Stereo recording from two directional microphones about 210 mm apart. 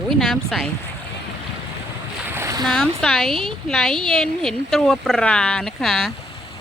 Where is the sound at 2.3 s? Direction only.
15° right (ahead or behind).